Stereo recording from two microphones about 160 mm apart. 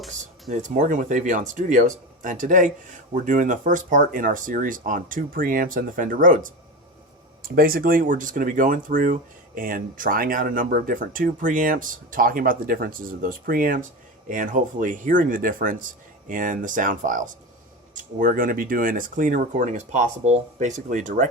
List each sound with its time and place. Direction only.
0.5 s speech: 50° right (ahead or behind)